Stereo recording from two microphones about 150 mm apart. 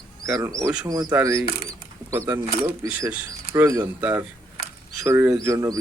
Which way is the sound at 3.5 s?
20° right (ahead or behind).